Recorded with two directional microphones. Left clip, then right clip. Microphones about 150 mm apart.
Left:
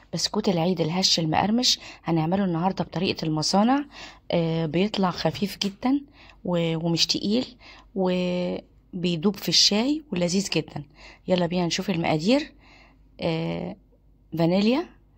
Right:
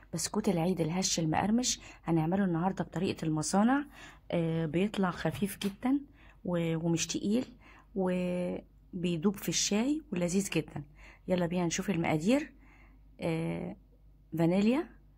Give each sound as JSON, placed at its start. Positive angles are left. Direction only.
{"t": 0.1, "sound": "a woman's voice", "side_deg": 5}
{"t": 13.2, "sound": "a sound", "side_deg": 20}
{"t": 14.3, "sound": "speech", "side_deg": 15}